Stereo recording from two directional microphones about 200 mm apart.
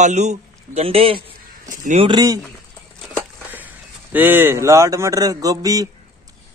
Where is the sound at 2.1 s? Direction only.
20° right (ahead or behind).